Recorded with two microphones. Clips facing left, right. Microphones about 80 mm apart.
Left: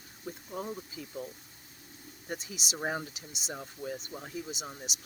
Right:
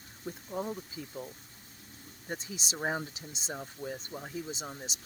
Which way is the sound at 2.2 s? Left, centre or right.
Right.